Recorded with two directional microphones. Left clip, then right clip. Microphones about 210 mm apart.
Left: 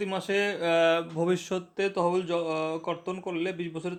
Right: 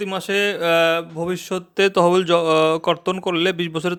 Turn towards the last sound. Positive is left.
turn(degrees=-40)  # may be behind; listen again after turning